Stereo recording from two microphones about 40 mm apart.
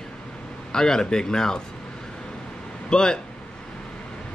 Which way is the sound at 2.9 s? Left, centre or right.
Centre.